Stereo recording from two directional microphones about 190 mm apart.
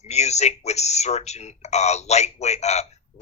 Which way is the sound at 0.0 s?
35° left (ahead or behind).